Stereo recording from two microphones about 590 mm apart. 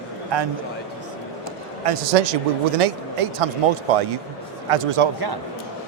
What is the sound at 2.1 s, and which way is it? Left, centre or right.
Speech, right.